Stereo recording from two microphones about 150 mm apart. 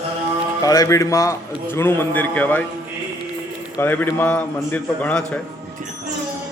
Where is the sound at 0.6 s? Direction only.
20° left (ahead or behind).